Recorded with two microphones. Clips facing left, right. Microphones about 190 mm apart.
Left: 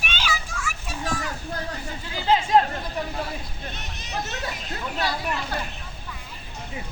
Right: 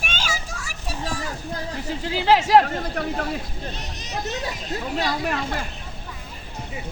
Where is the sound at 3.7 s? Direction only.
35° right (ahead or behind).